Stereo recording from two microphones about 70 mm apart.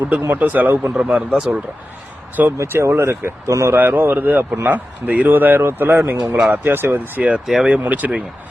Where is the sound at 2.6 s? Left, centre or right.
Right.